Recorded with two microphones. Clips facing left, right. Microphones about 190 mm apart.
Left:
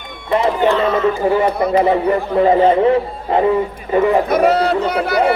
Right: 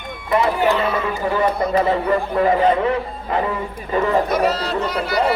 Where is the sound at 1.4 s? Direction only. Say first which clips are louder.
Left 3 dB; 20° left (ahead or behind).